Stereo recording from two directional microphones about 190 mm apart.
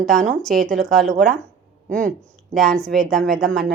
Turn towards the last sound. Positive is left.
turn(degrees=0)  # may be behind; listen again after turning